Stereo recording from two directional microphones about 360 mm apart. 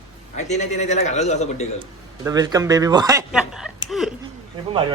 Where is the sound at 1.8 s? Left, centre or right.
Centre.